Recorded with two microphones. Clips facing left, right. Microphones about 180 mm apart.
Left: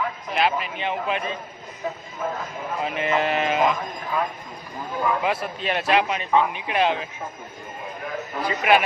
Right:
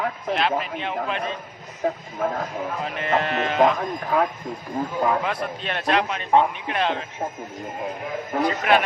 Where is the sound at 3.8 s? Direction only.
65° right (ahead or behind).